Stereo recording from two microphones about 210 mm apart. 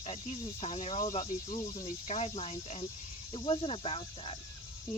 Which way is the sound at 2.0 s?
30° left (ahead or behind).